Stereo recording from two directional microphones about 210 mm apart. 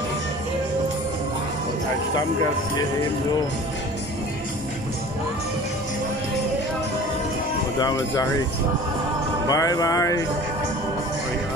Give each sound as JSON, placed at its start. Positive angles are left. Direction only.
{"t": 7.8, "sound": "speech", "side_deg": 15}
{"t": 9.5, "sound": "speech", "side_deg": 15}